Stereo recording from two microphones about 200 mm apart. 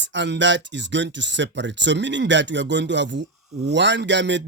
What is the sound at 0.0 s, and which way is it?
Speech, 60° right (ahead or behind).